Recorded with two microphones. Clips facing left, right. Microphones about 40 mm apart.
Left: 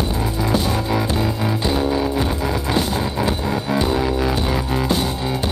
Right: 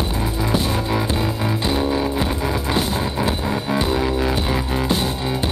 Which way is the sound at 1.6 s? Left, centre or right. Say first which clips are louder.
Left 1 dB; centre.